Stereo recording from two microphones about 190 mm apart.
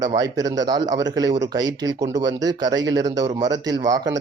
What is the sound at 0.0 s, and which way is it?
Speech, 20° right (ahead or behind).